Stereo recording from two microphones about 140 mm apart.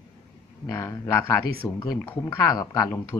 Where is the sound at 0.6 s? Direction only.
20° left (ahead or behind).